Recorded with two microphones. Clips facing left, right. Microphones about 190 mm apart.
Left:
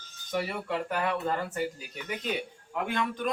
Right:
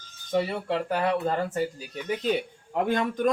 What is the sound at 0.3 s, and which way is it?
Speech, 25° right (ahead or behind).